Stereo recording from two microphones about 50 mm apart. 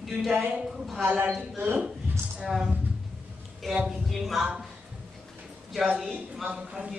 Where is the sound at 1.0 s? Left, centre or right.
Right.